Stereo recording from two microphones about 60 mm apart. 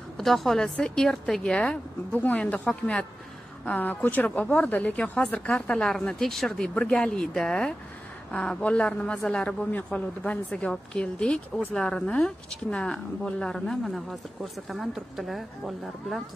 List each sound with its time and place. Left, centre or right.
0.2 s speech: centre
2.1 s speech: left
5.5 s speech: centre
6.6 s speech: centre
13.8 s speech: centre